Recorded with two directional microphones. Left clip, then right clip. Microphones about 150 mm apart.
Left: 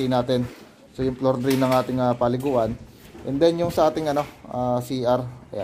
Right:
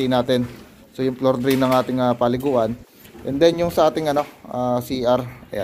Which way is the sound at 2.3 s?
Centre (ahead or behind).